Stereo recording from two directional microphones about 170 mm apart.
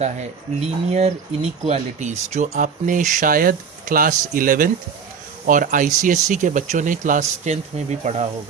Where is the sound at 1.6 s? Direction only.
40° right (ahead or behind).